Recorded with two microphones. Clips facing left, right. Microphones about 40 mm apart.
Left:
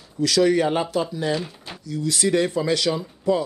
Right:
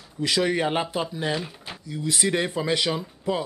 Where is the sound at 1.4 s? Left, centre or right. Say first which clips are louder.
Left 2 dB; centre.